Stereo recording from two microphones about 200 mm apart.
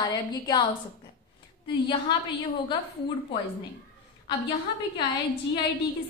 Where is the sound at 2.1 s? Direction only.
20° left (ahead or behind).